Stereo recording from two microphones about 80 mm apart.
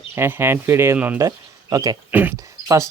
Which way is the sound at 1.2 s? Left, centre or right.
Right.